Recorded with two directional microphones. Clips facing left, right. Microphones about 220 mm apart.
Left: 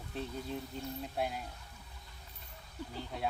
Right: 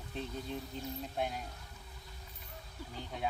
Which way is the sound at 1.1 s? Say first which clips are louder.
Left 1 dB; 5° left (ahead or behind).